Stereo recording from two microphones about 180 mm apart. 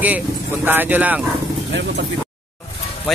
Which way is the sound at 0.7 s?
10° right (ahead or behind).